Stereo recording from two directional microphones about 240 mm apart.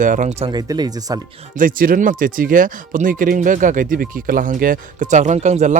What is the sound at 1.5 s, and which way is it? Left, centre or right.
Speech, right.